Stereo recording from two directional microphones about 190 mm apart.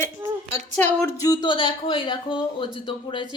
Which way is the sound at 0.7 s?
10° left (ahead or behind).